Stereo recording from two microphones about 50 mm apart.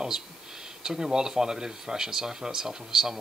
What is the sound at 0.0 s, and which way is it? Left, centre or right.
Speech, centre.